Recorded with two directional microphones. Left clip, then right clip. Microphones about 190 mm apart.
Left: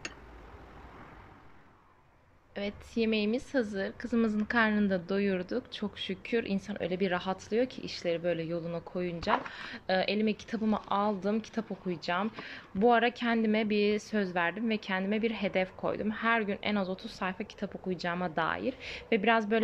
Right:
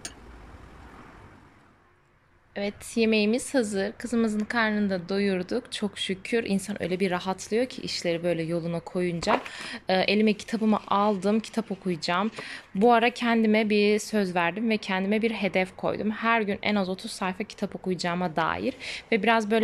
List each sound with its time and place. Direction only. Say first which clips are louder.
2.5 s a woman's voice: right 5 dB; centre (ahead or behind)